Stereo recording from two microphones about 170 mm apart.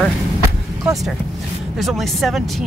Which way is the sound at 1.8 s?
Centre (ahead or behind).